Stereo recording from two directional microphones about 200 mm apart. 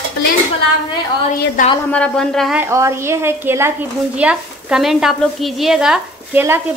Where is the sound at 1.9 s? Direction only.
5° left (ahead or behind).